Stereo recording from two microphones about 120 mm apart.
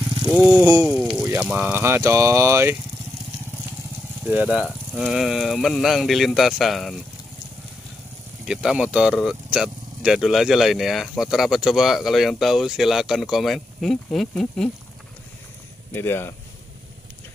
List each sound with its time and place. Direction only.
0.3 s vehicle: 5° right (ahead or behind)
0.6 s speech: 25° right (ahead or behind)
0.8 s speech: 5° right (ahead or behind); by 2.8 s 20° right (ahead or behind)
4.2 s speech: 10° right (ahead or behind)
8.5 s speech: 5° right (ahead or behind)
15.9 s speech: 20° left (ahead or behind)